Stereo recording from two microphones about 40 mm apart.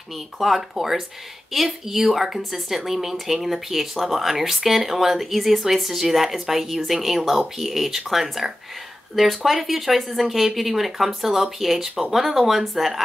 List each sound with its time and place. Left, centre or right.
0.4 s speech: centre